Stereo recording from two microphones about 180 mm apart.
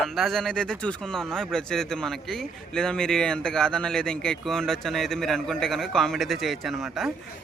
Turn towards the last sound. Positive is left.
turn(degrees=0)  # may be behind; listen again after turning